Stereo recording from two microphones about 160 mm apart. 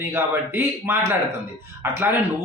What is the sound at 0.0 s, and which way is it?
Speech, 15° right (ahead or behind).